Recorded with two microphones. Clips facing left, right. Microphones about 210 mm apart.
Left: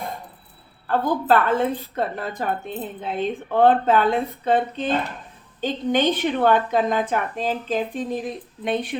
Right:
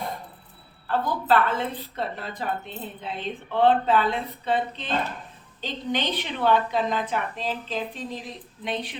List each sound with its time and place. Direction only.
0.9 s a woman's voice: 50° left (ahead or behind)